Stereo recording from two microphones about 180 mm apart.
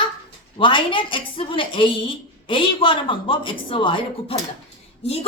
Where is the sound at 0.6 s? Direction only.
25° left (ahead or behind).